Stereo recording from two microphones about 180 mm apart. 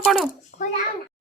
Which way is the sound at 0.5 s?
50° left (ahead or behind).